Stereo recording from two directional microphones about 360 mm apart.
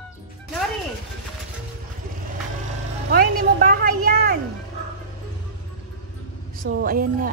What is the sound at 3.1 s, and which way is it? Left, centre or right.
Music, right.